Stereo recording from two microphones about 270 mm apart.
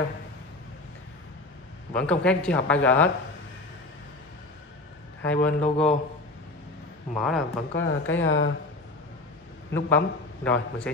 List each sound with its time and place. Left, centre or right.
2.0 s speech: centre
5.2 s speech: centre
7.2 s speech: centre
7.7 s speech: left
9.8 s speech: centre